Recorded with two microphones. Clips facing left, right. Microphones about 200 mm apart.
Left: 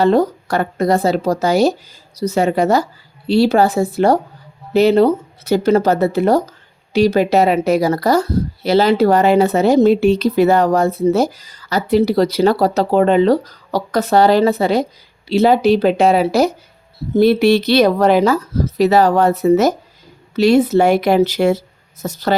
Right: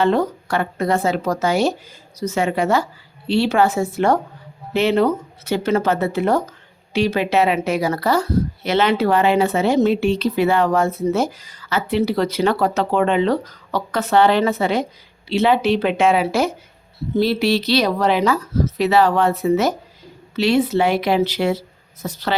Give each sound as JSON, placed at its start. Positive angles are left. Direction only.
{"t": 0.0, "sound": "speech", "side_deg": 35}
{"t": 17.2, "sound": "speech", "side_deg": 50}